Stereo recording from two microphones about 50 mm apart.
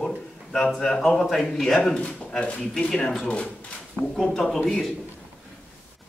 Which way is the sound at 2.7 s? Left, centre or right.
Centre.